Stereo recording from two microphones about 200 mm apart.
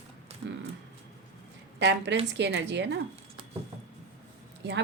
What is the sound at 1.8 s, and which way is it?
Speech, 60° right (ahead or behind).